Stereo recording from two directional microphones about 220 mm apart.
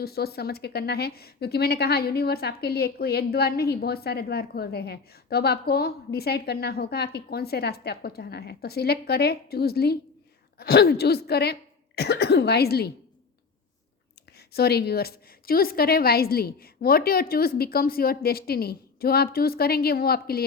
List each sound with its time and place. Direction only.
0.0 s speech: 45° left (ahead or behind)
14.3 s speech: 45° left (ahead or behind)